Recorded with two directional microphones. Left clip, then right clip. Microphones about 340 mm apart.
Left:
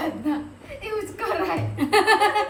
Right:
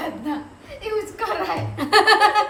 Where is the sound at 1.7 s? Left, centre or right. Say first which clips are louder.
Right 4 dB; centre.